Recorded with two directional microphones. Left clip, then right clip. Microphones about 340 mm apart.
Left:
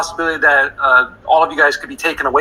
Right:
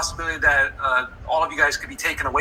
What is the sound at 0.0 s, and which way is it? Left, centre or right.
A man's voice, centre.